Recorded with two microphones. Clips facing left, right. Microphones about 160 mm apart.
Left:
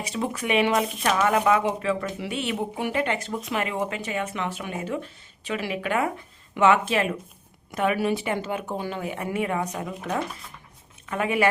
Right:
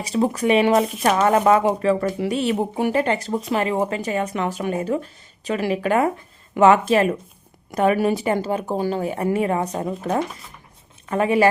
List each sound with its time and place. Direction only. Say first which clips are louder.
0.0 s speech: right 8 dB; 35° right (ahead or behind)